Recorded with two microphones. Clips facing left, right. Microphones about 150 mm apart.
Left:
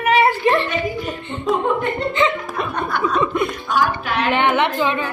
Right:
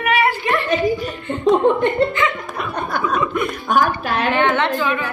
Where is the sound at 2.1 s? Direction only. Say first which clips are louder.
Left 2 dB; 25° left (ahead or behind).